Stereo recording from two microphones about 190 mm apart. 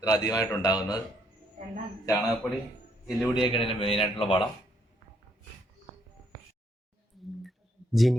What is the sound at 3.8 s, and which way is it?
Speech, 30° left (ahead or behind).